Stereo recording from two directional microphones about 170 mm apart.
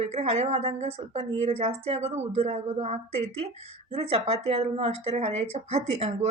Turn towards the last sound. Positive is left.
turn(degrees=-40)  # may be behind; listen again after turning